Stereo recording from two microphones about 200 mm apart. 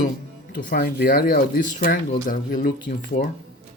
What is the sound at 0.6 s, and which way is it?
Speech, 45° left (ahead or behind).